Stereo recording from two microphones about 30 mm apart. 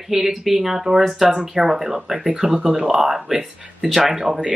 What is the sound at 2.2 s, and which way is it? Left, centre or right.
A woman's voice, right.